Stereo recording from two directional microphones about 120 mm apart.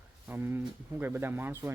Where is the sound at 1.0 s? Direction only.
15° right (ahead or behind).